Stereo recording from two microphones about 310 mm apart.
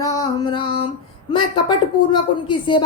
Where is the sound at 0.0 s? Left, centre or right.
Centre.